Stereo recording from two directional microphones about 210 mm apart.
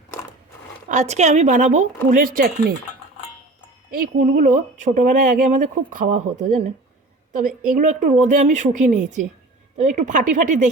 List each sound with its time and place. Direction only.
0.9 s speech: 35° right (ahead or behind)
3.9 s speech: 40° right (ahead or behind)